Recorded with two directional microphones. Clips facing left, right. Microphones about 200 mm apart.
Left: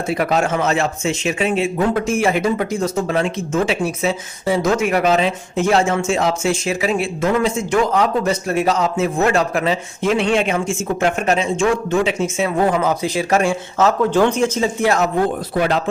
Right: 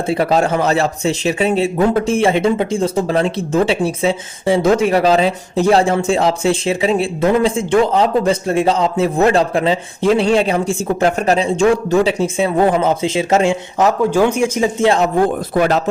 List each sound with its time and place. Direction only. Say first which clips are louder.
0.1 s a man's voice: right 3 dB; 30° right (ahead or behind); by 14.7 s 10° right (ahead or behind)
14.8 s speech: right 4 dB; 25° right (ahead or behind)
15.5 s speech: right 4 dB; 45° right (ahead or behind)